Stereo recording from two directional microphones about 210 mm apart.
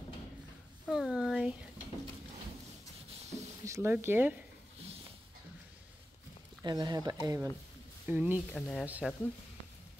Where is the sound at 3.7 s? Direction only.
10° right (ahead or behind).